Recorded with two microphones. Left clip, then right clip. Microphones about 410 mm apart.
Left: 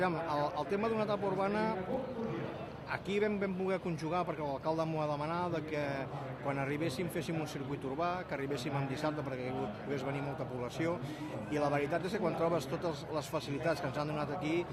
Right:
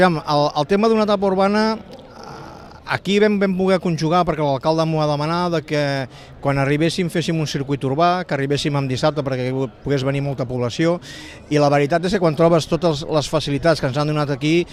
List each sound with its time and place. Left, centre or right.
0.0 s speech: right
2.9 s speech: right